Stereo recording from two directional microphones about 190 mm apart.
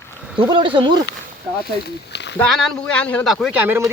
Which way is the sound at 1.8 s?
65° left (ahead or behind).